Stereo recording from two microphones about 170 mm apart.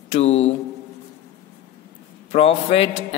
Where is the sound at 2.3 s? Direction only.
35° left (ahead or behind).